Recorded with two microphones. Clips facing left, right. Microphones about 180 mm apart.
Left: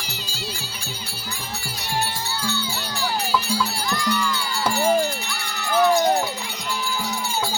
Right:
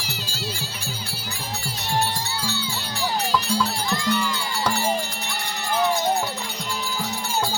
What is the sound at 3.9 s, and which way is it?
Music, 25° right (ahead or behind).